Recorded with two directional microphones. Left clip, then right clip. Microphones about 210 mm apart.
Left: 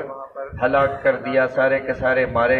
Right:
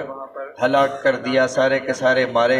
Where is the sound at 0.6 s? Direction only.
45° right (ahead or behind).